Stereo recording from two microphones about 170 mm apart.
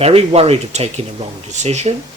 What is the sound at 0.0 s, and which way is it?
Speech, 35° right (ahead or behind).